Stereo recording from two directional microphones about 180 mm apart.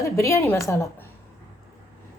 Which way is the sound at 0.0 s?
15° left (ahead or behind).